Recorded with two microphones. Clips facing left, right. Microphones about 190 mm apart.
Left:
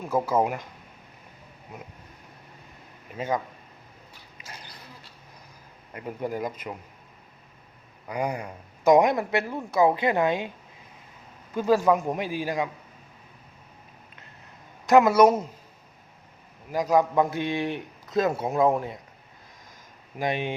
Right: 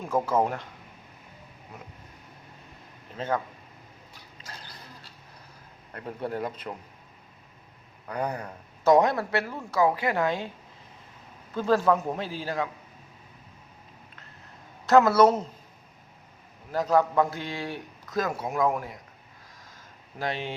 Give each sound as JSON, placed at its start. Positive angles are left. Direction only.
{"t": 0.0, "sound": "speech", "side_deg": 10}
{"t": 3.2, "sound": "speech", "side_deg": 10}
{"t": 4.4, "sound": "a sound", "side_deg": 10}
{"t": 5.9, "sound": "speech", "side_deg": 10}
{"t": 8.0, "sound": "speech", "side_deg": 10}
{"t": 11.5, "sound": "speech", "side_deg": 10}
{"t": 14.8, "sound": "speech", "side_deg": 15}
{"t": 16.7, "sound": "a man's voice", "side_deg": 10}
{"t": 20.1, "sound": "speech", "side_deg": 15}